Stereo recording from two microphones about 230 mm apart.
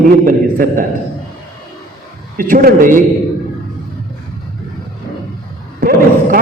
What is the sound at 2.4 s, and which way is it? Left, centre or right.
Speech, right.